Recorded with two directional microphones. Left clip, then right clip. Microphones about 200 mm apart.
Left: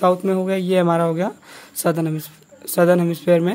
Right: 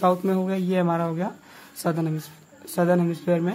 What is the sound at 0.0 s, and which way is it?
Speech, 40° left (ahead or behind).